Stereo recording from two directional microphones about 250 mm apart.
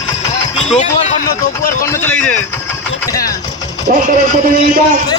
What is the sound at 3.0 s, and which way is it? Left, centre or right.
Vehicle, centre.